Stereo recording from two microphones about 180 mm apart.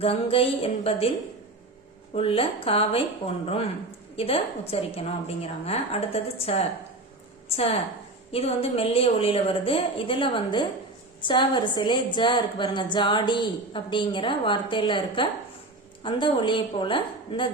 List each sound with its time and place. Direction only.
0.0 s a woman's voice: 30° left (ahead or behind)
2.1 s a woman's voice: 30° left (ahead or behind)
7.5 s a woman's voice: 35° left (ahead or behind)